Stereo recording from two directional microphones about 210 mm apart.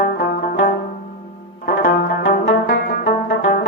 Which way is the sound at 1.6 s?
40° left (ahead or behind).